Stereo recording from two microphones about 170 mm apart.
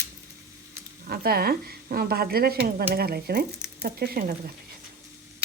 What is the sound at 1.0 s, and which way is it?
Speech, 60° right (ahead or behind).